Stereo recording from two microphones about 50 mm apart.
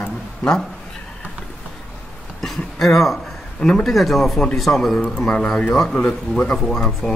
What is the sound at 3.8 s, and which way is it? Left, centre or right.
A man's voice, centre.